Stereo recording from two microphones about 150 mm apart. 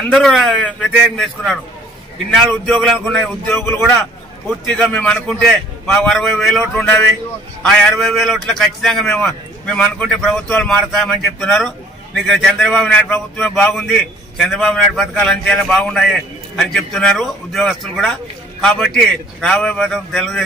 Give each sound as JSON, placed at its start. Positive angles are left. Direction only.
{"t": 0.1, "sound": "a man's voice", "side_deg": 0}
{"t": 2.6, "sound": "a man's voice", "side_deg": 5}
{"t": 3.5, "sound": "a man's voice", "side_deg": 15}
{"t": 4.5, "sound": "a man's voice", "side_deg": 5}